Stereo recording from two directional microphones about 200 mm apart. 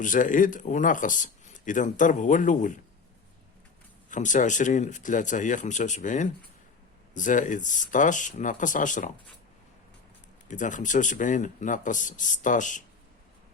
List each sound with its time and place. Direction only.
0.0 s speech: 40° left (ahead or behind)
4.1 s speech: 40° left (ahead or behind)
10.5 s speech: 40° left (ahead or behind)